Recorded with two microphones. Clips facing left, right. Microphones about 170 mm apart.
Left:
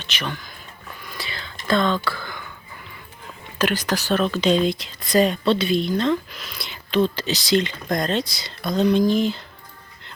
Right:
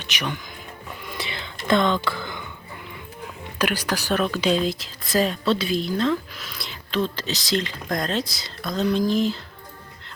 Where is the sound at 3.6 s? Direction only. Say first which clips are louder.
Left 2 dB; 10° right (ahead or behind).